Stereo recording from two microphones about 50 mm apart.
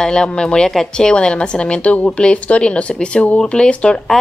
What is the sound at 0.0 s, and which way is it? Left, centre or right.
A woman's voice, centre.